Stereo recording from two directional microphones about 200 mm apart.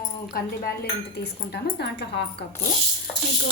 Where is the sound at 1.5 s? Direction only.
55° left (ahead or behind).